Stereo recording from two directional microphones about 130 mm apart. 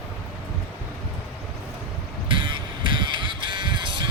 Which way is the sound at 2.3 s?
35° right (ahead or behind).